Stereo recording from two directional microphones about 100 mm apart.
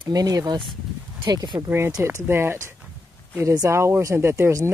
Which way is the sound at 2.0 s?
25° right (ahead or behind).